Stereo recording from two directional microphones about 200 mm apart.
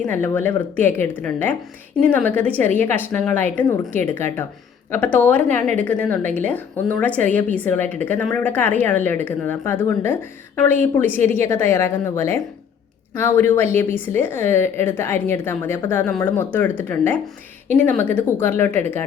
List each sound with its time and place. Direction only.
0.0 s a woman's voice: 10° left (ahead or behind)
5.5 s a woman's voice: 40° right (ahead or behind)
5.7 s a woman's voice: 10° left (ahead or behind)